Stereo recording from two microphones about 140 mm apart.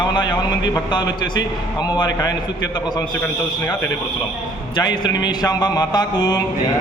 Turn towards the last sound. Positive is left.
turn(degrees=30)  # may be behind; listen again after turning